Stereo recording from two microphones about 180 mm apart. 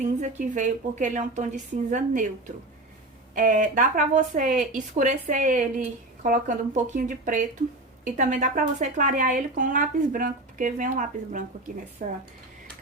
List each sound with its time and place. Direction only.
0.0 s speech: 45° right (ahead or behind)
3.3 s speech: 45° right (ahead or behind)